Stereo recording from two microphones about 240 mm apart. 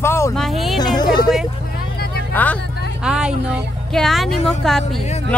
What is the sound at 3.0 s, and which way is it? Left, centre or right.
Speech, centre.